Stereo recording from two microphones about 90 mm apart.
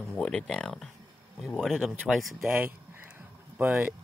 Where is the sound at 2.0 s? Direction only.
5° right (ahead or behind).